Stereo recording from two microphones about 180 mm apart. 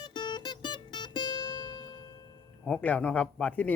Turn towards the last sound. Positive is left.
turn(degrees=5)  # may be behind; listen again after turning